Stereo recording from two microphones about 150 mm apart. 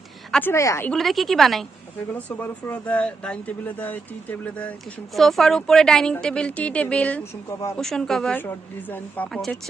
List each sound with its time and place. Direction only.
0.3 s speech: 10° left (ahead or behind)
0.5 s speech: 20° left (ahead or behind)
0.9 s a woman's voice: centre (ahead or behind)
2.1 s a woman's voice: 10° left (ahead or behind)